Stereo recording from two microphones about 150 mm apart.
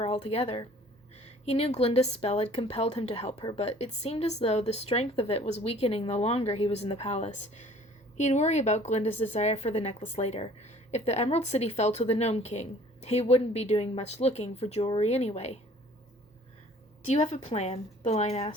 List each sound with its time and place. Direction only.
0.0 s a woman's voice: 45° left (ahead or behind)
17.1 s a woman's voice: 45° left (ahead or behind)